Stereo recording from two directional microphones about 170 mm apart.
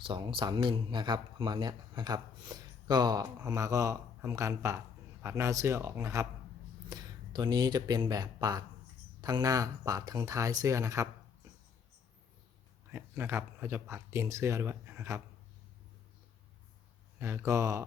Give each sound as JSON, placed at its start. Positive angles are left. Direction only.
{"t": 0.0, "sound": "speech", "side_deg": -30}
{"t": 12.9, "sound": "speech", "side_deg": -15}
{"t": 17.2, "sound": "speech", "side_deg": -15}